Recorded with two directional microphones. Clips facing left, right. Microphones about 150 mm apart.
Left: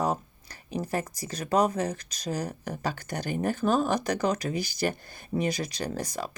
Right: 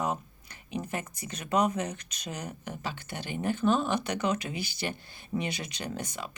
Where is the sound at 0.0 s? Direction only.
35° left (ahead or behind).